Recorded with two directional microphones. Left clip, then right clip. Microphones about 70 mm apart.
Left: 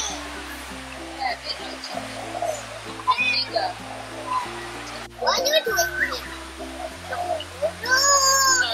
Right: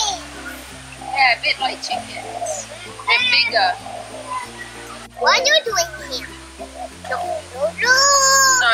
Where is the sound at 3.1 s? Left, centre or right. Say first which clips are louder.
Right 6 dB; right.